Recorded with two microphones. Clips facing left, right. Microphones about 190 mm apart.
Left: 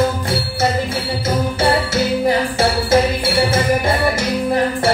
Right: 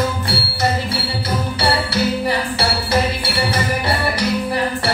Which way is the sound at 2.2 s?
45° left (ahead or behind).